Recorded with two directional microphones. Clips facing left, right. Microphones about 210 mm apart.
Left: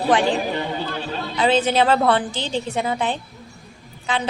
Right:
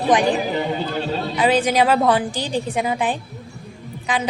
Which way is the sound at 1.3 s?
10° right (ahead or behind).